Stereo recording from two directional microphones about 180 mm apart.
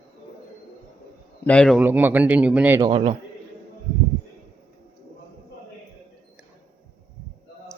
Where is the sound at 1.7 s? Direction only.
10° right (ahead or behind).